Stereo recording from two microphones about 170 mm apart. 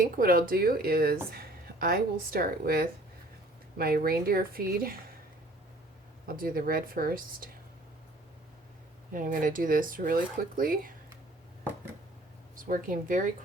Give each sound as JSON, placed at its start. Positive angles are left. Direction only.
{"t": 0.0, "sound": "speech", "side_deg": -60}
{"t": 6.2, "sound": "speech", "side_deg": -60}
{"t": 9.1, "sound": "speech", "side_deg": -50}
{"t": 12.5, "sound": "speech", "side_deg": -55}